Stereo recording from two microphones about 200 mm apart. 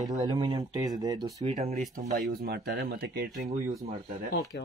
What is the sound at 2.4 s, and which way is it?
Speech, 55° right (ahead or behind).